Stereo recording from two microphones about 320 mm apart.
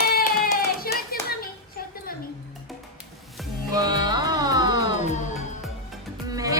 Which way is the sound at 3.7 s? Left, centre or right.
Centre.